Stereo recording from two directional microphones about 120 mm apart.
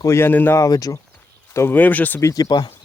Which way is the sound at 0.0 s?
20° left (ahead or behind).